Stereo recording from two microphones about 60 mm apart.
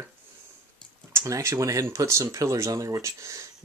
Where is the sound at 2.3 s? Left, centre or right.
Right.